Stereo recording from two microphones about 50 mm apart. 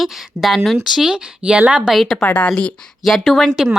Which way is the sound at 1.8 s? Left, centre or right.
Centre.